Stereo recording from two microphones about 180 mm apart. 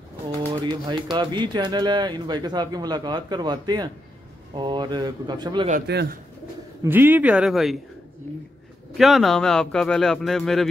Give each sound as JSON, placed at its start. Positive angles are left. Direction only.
{"t": 0.5, "sound": "speech", "side_deg": -25}
{"t": 5.9, "sound": "speech", "side_deg": -65}
{"t": 6.8, "sound": "speech", "side_deg": -10}
{"t": 8.9, "sound": "speech", "side_deg": 0}